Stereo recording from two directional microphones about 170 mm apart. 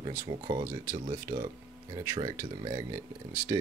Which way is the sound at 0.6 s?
55° right (ahead or behind).